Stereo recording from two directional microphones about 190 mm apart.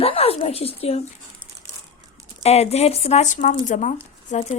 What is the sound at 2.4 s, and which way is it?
Speech, 35° left (ahead or behind).